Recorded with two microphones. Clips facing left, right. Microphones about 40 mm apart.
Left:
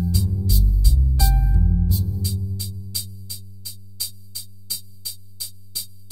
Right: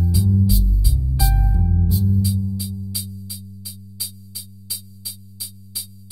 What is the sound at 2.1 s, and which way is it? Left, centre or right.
Music, centre.